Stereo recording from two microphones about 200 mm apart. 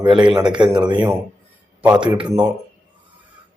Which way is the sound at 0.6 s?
20° right (ahead or behind).